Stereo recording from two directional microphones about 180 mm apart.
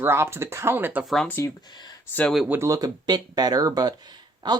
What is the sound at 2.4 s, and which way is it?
Speech, 15° right (ahead or behind).